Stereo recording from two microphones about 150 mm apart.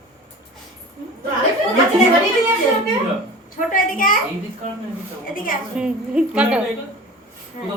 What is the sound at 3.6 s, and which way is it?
Speech, 65° left (ahead or behind).